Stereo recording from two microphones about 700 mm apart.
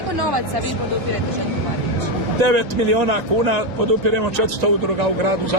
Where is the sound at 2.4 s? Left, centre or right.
Right.